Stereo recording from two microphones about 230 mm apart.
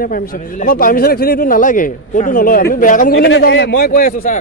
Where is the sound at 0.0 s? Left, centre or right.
Left.